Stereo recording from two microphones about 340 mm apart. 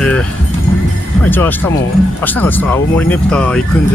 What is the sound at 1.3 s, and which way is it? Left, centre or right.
Speech, centre.